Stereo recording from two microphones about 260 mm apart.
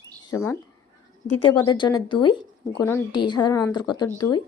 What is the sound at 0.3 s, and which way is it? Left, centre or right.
Speech, centre.